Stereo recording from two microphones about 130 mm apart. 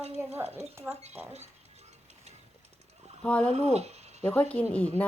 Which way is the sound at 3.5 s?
55° right (ahead or behind).